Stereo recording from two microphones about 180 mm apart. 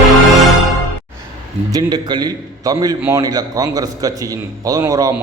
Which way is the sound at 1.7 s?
25° right (ahead or behind).